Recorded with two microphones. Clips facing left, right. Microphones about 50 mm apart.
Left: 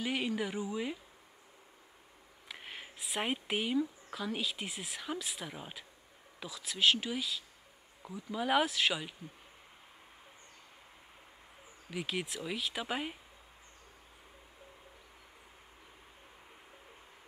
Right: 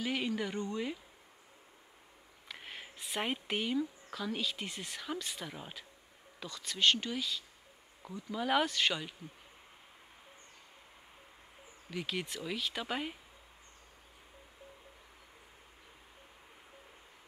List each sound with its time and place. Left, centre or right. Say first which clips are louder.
0.0 s speech: even; centre
2.4 s speech: even; centre
11.9 s speech: left 1 dB; centre